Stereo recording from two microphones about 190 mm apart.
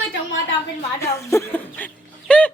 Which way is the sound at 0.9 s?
15° left (ahead or behind).